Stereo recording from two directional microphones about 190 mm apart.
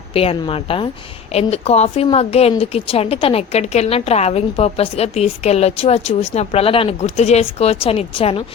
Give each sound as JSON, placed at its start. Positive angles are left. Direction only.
{"t": 0.1, "sound": "a woman's voice", "side_deg": 30}